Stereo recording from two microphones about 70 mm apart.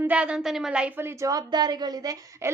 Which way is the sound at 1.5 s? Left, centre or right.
Right.